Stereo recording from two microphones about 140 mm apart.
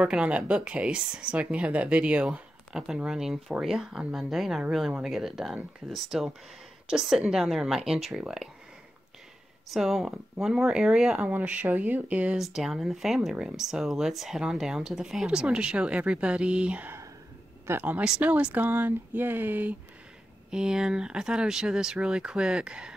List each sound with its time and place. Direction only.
0.0 s speech: 10° right (ahead or behind)
9.7 s speech: 5° right (ahead or behind)